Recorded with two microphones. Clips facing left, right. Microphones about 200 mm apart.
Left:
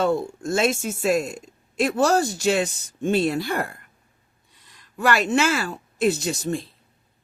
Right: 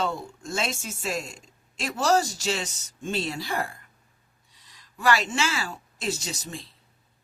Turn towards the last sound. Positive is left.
turn(degrees=55)  # may be behind; listen again after turning